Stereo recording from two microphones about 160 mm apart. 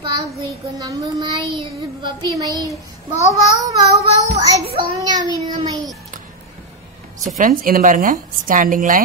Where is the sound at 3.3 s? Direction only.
20° right (ahead or behind).